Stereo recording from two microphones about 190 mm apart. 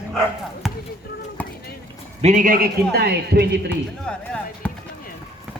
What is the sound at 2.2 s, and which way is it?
A man's voice, 40° right (ahead or behind).